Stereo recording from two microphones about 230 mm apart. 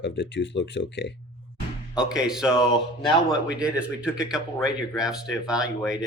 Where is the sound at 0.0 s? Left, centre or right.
Left.